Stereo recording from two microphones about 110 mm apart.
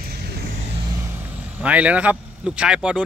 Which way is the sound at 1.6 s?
10° right (ahead or behind).